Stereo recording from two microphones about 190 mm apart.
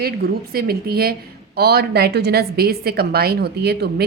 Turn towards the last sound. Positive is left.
turn(degrees=-55)  # may be behind; listen again after turning